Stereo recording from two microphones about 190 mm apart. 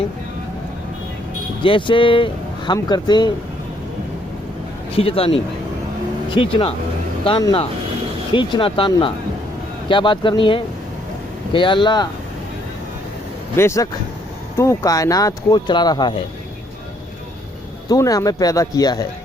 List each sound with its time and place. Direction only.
1.6 s speech: 25° left (ahead or behind)
4.9 s speech: 30° left (ahead or behind)
13.6 s speech: 15° left (ahead or behind)
17.8 s speech: 20° left (ahead or behind)